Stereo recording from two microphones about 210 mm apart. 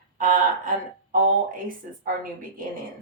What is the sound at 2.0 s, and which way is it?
Speech, 40° right (ahead or behind).